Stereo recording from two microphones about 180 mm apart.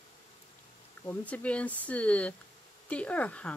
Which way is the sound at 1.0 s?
10° left (ahead or behind).